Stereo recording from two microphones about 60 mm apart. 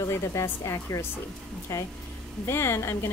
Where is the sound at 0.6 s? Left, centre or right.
Left.